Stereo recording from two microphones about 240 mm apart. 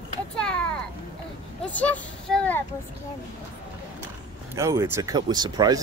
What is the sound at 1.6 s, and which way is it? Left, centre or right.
Speech, centre.